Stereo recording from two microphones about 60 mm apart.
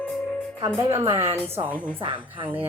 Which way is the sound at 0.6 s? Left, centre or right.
Right.